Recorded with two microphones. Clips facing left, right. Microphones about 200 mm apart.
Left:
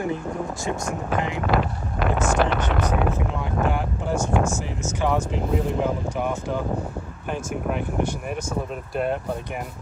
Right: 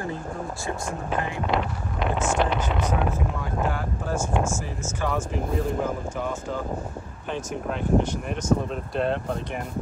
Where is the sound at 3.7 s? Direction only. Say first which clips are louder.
Left 3 dB; 20° left (ahead or behind).